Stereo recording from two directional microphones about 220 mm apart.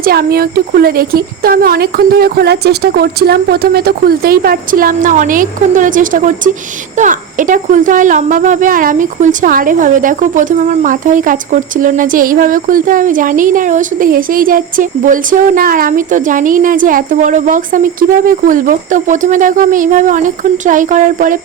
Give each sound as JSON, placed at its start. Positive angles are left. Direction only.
{"t": 0.0, "sound": "speech", "side_deg": -45}